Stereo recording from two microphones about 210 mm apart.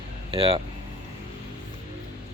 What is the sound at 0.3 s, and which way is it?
Speech, 25° right (ahead or behind).